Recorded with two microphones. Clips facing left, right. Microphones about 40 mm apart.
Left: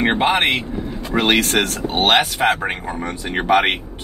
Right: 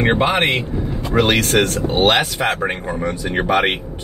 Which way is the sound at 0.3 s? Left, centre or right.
Left.